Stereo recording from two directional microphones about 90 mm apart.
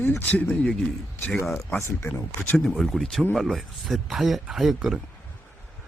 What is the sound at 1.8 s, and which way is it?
Speech, 25° left (ahead or behind).